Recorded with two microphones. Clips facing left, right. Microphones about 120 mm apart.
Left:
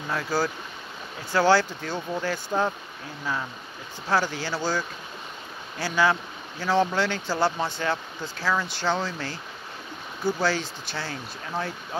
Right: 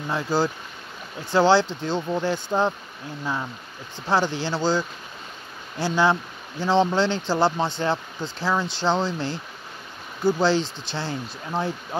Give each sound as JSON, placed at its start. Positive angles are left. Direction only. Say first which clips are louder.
{"t": 0.1, "sound": "speech", "louder": "right 3 dB", "side_deg": -20}
{"t": 4.1, "sound": "speech", "louder": "right 3 dB", "side_deg": -25}
{"t": 10.4, "sound": "speech", "louder": "right 5 dB", "side_deg": -25}